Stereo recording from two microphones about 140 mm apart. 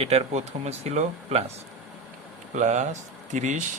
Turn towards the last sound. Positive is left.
turn(degrees=-60)  # may be behind; listen again after turning